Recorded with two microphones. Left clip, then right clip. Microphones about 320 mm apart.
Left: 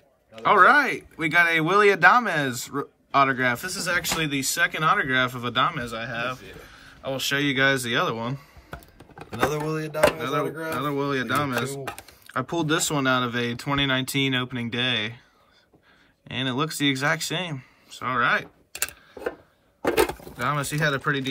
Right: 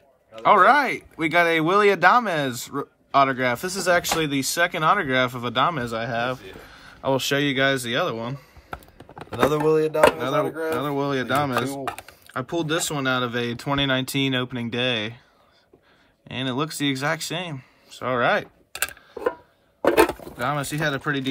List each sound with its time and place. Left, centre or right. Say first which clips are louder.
0.4 s speech: right 1 dB; centre
9.2 s chopping: right 5 dB; centre
11.8 s chopping: right 4 dB; centre
12.3 s speech: left 1 dB; centre
16.3 s speech: even; centre
19.9 s a sound: right 4 dB; centre
20.3 s speech: left 1 dB; centre